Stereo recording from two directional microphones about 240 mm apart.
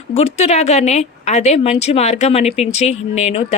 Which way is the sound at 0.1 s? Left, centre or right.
Left.